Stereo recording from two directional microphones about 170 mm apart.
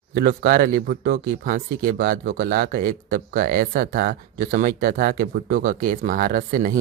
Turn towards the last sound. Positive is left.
turn(degrees=-55)  # may be behind; listen again after turning